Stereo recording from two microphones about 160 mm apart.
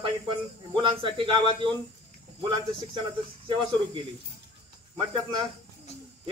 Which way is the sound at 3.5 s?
30° right (ahead or behind).